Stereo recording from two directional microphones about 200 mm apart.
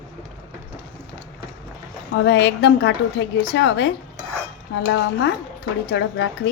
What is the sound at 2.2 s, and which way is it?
A woman's voice, 60° left (ahead or behind).